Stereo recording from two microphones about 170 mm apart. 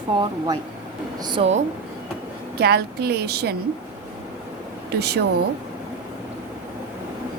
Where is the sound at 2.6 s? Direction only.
65° right (ahead or behind).